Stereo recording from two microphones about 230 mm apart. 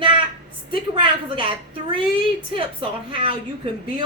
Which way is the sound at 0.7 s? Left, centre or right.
Right.